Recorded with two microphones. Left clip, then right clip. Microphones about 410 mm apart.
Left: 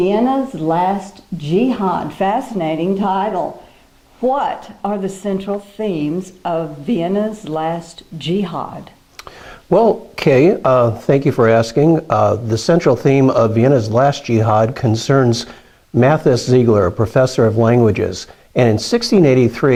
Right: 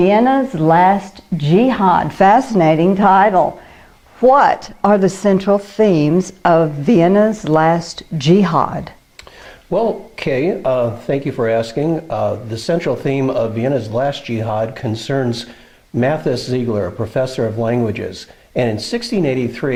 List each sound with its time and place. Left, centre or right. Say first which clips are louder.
0.0 s speech: right 3 dB; right
9.6 s speech: left 4 dB; left